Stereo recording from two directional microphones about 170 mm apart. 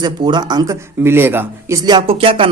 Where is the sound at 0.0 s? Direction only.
25° right (ahead or behind).